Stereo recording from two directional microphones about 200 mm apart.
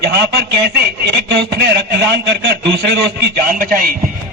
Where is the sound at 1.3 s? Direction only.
55° right (ahead or behind).